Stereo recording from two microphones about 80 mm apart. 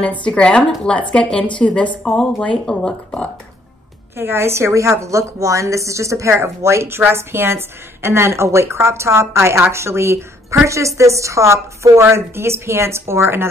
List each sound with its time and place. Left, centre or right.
0.0 s a woman's voice: centre
4.2 s a woman's voice: right